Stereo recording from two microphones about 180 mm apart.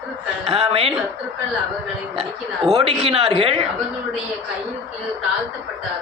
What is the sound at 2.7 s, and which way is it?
Speech, 35° right (ahead or behind).